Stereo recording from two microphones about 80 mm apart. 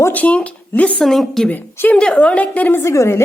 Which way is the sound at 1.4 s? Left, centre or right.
Left.